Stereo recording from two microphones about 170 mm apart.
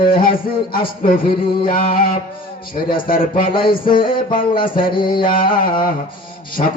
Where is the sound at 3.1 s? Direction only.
55° left (ahead or behind).